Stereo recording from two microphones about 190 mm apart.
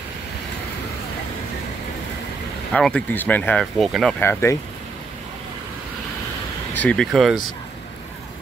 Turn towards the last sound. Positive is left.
turn(degrees=0)  # may be behind; listen again after turning